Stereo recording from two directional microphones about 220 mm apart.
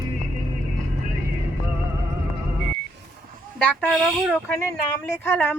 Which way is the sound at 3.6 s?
5° left (ahead or behind).